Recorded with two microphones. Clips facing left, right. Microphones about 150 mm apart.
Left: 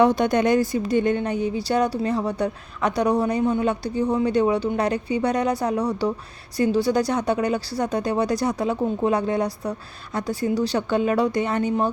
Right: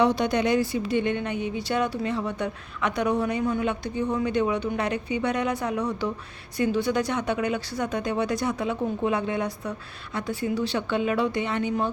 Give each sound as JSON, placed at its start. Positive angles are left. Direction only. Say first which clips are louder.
{"t": 0.0, "sound": "a woman's voice", "louder": "left 4 dB", "side_deg": 50}